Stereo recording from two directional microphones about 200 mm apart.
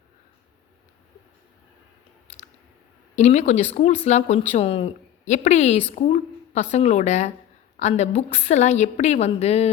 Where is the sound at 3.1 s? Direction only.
35° left (ahead or behind).